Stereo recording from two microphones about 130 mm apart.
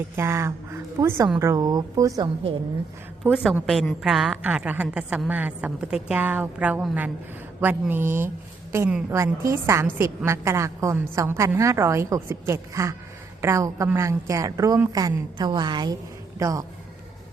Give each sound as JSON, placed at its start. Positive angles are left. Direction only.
{"t": 0.2, "sound": "a woman's voice", "side_deg": -20}
{"t": 3.2, "sound": "a woman's voice", "side_deg": -5}